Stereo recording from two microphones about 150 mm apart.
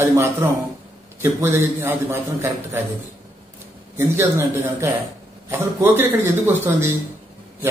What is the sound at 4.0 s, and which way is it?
Speech, 15° right (ahead or behind).